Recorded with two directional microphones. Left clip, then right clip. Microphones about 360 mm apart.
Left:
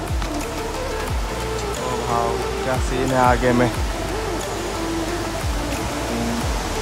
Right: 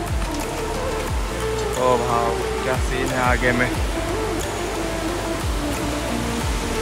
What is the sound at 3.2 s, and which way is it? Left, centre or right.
Speech, centre.